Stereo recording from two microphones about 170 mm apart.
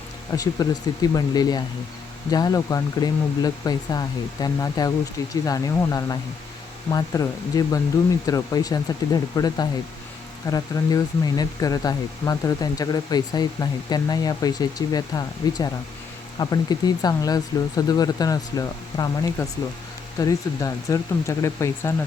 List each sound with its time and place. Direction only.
0.3 s speech: 20° left (ahead or behind)